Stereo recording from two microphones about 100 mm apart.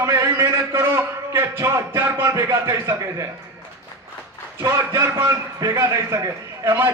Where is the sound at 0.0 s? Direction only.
25° right (ahead or behind).